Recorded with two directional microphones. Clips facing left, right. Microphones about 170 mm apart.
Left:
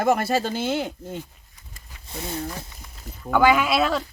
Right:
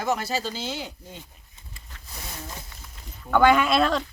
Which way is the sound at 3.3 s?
5° left (ahead or behind).